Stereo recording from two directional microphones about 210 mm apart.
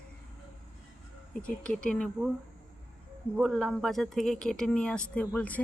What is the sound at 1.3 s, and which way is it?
Speech, 5° left (ahead or behind).